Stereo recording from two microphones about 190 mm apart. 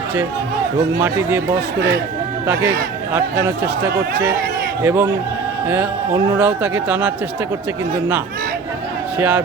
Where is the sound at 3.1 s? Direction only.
10° right (ahead or behind).